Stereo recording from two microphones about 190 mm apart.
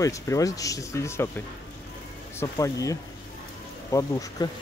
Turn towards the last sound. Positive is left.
turn(degrees=15)  # may be behind; listen again after turning